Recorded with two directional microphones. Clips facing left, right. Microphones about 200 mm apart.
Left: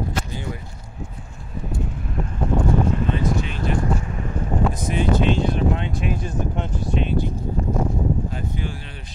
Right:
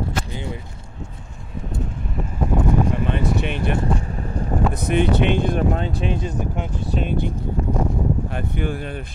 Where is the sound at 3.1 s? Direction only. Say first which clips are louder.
Right 1 dB; 65° right (ahead or behind).